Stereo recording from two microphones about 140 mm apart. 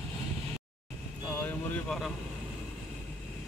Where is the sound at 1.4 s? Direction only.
5° left (ahead or behind).